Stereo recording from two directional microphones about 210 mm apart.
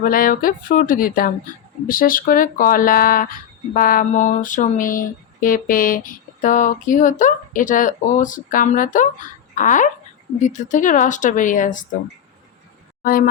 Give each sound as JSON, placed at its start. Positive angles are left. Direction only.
{"t": 0.0, "sound": "speech", "side_deg": 40}
{"t": 3.8, "sound": "a sound", "side_deg": 40}
{"t": 13.0, "sound": "speech", "side_deg": 40}